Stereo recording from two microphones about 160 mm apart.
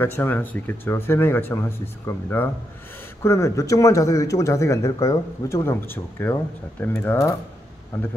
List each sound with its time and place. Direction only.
0.0 s speech: 15° left (ahead or behind)